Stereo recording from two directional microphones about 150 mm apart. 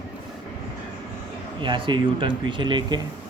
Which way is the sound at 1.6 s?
35° right (ahead or behind).